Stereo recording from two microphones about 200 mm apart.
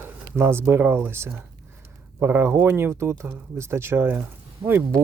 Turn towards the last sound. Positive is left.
turn(degrees=-15)  # may be behind; listen again after turning